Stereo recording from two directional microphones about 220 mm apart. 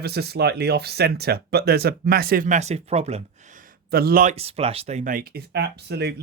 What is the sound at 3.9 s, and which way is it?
Speech, 45° right (ahead or behind).